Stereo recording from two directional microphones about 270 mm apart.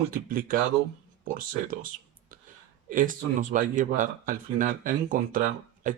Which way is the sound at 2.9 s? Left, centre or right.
Right.